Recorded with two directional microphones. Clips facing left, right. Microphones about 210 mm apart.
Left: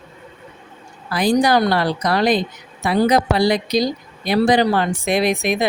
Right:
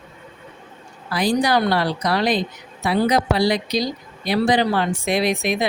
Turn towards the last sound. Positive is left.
turn(degrees=50)  # may be behind; listen again after turning